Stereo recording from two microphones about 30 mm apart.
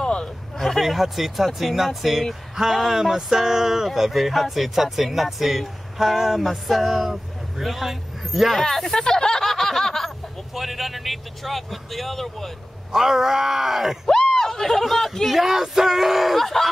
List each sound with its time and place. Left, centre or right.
0.0 s hubbub: left
0.7 s speech: centre
3.2 s speech: centre
8.5 s speech: centre
9.0 s a sound: centre
10.5 s speech: centre
12.9 s speech: centre
14.3 s speech: centre
15.2 s speech: centre
16.3 s speech: centre